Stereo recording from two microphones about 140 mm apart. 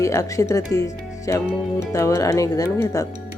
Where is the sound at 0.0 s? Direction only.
20° left (ahead or behind).